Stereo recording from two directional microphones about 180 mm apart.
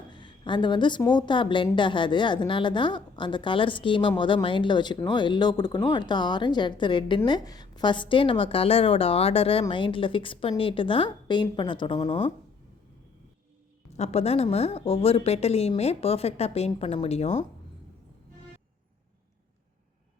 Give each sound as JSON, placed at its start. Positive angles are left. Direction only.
{"t": 0.1, "sound": "a woman's voice", "side_deg": 25}
{"t": 13.9, "sound": "a woman's voice", "side_deg": 35}